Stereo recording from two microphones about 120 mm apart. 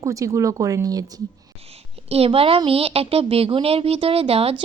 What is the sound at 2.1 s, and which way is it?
A woman's voice, 55° right (ahead or behind).